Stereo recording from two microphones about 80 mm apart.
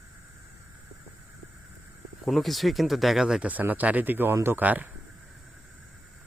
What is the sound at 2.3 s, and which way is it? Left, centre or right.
Speech, centre.